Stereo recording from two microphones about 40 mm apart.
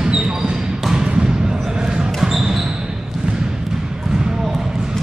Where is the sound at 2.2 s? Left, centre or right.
Centre.